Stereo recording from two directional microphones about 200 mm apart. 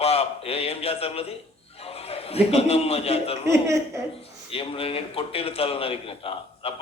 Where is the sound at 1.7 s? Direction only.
30° left (ahead or behind).